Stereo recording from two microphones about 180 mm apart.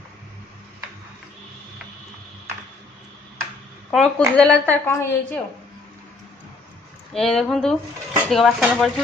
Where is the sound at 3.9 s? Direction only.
Centre (ahead or behind).